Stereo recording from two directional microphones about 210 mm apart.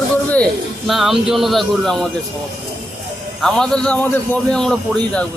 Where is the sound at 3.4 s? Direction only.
5° left (ahead or behind).